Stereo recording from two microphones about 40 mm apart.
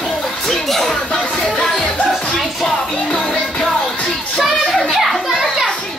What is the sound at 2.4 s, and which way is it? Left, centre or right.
Music, centre.